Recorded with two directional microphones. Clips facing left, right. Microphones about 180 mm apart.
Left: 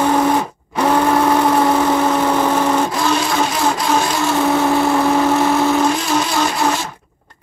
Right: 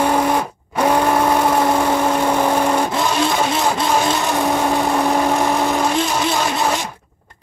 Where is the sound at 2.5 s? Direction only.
10° right (ahead or behind).